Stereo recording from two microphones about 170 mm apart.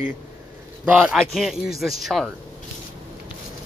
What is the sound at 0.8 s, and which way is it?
Speech, 10° right (ahead or behind).